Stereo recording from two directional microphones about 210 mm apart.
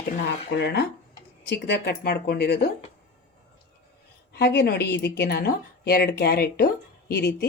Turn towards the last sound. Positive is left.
turn(degrees=50)  # may be behind; listen again after turning